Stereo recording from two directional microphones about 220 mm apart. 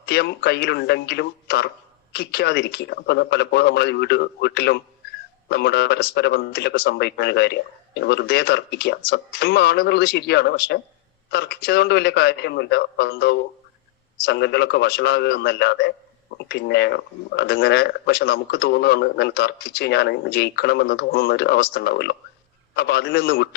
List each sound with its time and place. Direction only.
0.0 s speech: 50° left (ahead or behind)